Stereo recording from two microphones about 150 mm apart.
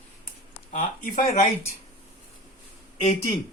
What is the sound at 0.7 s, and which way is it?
Speech, 60° left (ahead or behind).